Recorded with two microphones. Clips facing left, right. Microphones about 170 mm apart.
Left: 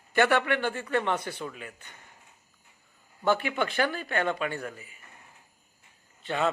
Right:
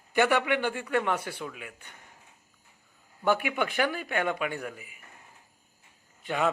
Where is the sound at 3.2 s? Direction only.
10° right (ahead or behind).